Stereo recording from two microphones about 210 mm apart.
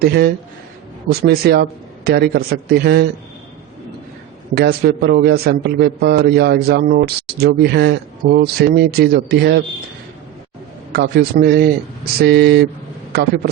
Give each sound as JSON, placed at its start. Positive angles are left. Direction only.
{"t": 0.0, "sound": "a man's voice", "side_deg": -50}
{"t": 4.5, "sound": "a man's voice", "side_deg": -50}
{"t": 10.9, "sound": "a man's voice", "side_deg": -50}